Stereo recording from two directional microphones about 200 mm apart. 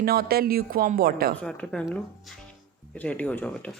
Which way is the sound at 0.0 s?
50° right (ahead or behind).